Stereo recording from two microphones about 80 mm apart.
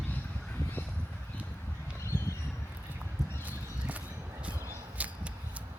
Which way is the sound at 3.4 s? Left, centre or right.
Centre.